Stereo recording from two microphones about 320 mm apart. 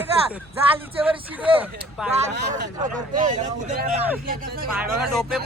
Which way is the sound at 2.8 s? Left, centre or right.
Right.